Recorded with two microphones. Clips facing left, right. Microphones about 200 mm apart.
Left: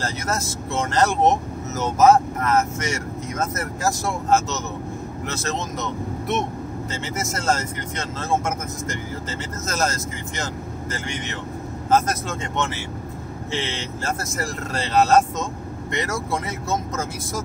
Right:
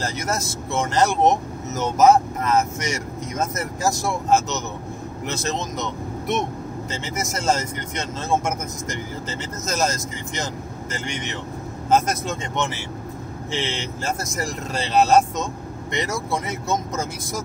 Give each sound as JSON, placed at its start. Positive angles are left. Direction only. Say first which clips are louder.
{"t": 0.0, "sound": "speech", "louder": "even", "side_deg": -15}
{"t": 14.0, "sound": "speech", "louder": "even", "side_deg": -15}